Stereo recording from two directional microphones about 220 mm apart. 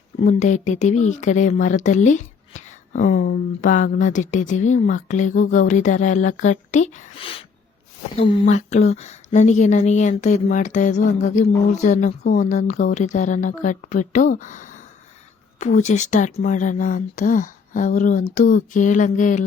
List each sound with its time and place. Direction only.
0.2 s speech: 35° left (ahead or behind)